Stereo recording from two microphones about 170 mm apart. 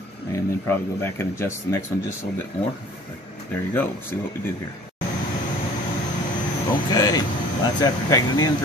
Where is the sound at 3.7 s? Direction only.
10° left (ahead or behind).